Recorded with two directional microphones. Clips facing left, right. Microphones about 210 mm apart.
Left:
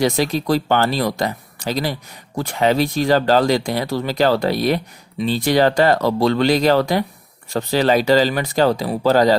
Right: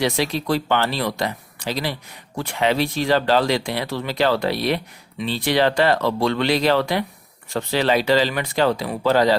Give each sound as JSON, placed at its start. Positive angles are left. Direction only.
{"t": 0.0, "sound": "speech", "side_deg": 45}